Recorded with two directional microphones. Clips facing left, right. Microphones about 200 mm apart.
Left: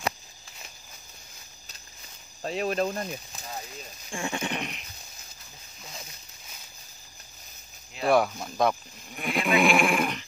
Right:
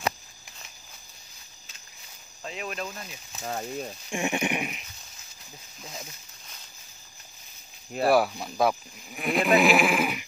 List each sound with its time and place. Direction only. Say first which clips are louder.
2.4 s speech: left 8 dB; 35° left (ahead or behind)
3.4 s speech: right 10 dB; 55° right (ahead or behind)
4.1 s speech: right 3 dB; 20° right (ahead or behind)
8.0 s speech: right 1 dB; 5° right (ahead or behind)